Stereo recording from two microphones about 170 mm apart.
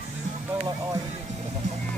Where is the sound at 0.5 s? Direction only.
15° right (ahead or behind).